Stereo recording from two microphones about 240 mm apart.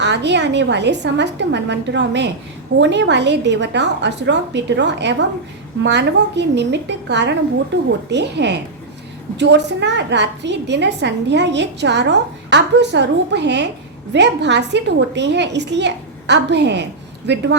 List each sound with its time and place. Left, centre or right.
0.0 s a woman's voice: right